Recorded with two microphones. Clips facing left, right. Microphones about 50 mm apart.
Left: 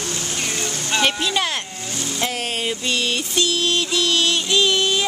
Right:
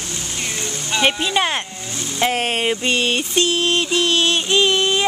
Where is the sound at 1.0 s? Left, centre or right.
Centre.